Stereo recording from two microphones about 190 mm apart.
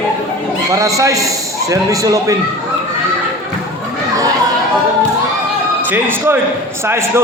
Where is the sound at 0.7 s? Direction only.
15° right (ahead or behind).